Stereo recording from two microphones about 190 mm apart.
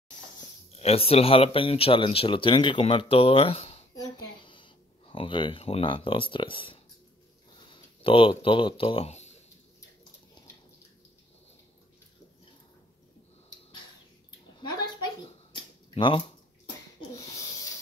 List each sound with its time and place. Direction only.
0.7 s speech: 30° left (ahead or behind)
3.9 s a sound: 20° left (ahead or behind)
7.7 s speech: 25° left (ahead or behind)
15.9 s speech: 25° left (ahead or behind)